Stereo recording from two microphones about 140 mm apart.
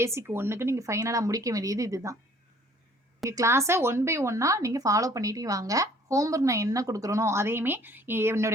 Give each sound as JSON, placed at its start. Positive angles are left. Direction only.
{"t": 0.0, "sound": "speech", "side_deg": -20}
{"t": 3.2, "sound": "speech", "side_deg": -20}